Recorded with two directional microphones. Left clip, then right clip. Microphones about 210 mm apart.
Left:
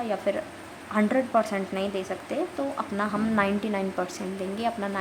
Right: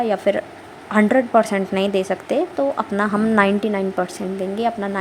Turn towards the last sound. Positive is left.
turn(degrees=-25)  # may be behind; listen again after turning